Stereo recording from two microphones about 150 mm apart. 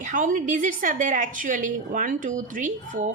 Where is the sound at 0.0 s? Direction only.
60° right (ahead or behind).